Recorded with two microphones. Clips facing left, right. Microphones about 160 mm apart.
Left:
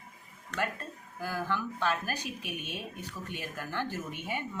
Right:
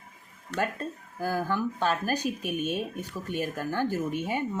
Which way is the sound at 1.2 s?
45° right (ahead or behind).